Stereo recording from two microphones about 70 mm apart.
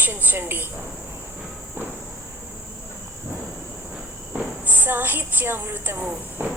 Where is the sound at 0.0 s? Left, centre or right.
Right.